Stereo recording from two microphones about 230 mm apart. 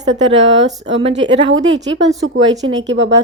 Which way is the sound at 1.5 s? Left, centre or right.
Right.